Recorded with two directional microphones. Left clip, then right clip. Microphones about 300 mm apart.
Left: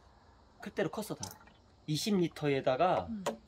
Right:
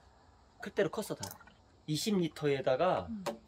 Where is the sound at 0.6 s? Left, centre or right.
Centre.